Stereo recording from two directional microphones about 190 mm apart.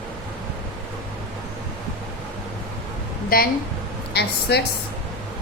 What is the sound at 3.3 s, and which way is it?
Speech, 50° left (ahead or behind).